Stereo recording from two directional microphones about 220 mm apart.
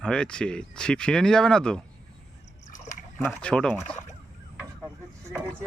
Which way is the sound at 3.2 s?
5° left (ahead or behind).